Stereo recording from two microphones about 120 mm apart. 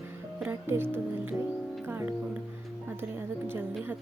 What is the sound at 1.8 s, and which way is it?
Music, 20° right (ahead or behind).